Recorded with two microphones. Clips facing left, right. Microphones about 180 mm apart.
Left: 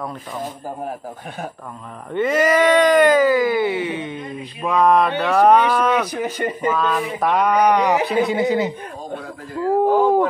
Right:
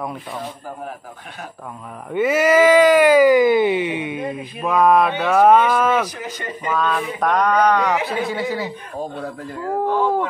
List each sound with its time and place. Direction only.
2.1 s speech: 5° right (ahead or behind)
6.1 s a man's voice: 55° left (ahead or behind)
6.7 s speech: 5° left (ahead or behind)
9.8 s a sound: 15° left (ahead or behind)